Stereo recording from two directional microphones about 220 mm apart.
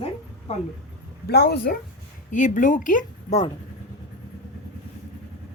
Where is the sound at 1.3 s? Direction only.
50° left (ahead or behind).